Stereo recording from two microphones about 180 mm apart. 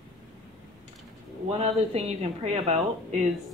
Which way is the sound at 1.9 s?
35° right (ahead or behind).